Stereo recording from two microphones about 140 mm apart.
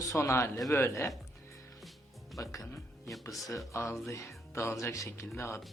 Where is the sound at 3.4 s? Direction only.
20° left (ahead or behind).